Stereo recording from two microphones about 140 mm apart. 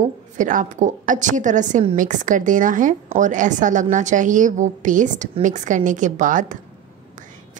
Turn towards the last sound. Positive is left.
turn(degrees=-65)  # may be behind; listen again after turning